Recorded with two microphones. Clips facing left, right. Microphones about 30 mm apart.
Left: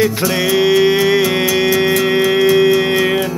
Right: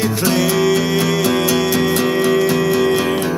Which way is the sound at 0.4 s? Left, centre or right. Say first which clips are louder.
Left 5 dB; left.